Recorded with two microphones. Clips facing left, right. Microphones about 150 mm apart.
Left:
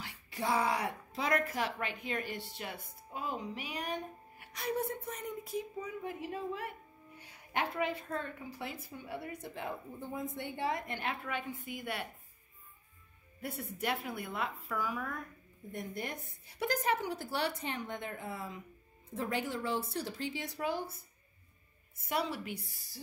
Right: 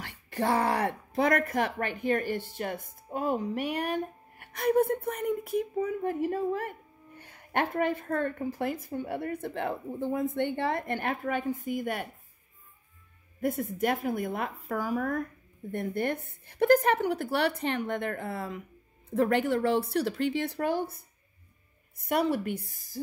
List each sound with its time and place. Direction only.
0.3 s speech: 60° right (ahead or behind); by 12.1 s 45° right (ahead or behind)
13.4 s a woman's voice: 45° right (ahead or behind)
15.7 s speech: 60° right (ahead or behind)
22.0 s a woman's voice: 55° right (ahead or behind)